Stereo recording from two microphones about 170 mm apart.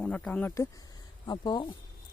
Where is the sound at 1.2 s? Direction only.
25° left (ahead or behind).